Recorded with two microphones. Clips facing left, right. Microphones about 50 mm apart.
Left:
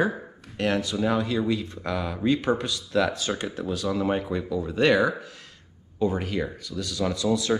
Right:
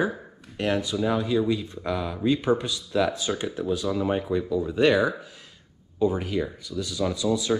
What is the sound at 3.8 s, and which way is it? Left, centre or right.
Speech, centre.